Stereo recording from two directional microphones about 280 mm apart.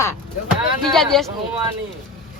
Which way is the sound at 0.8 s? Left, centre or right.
Centre.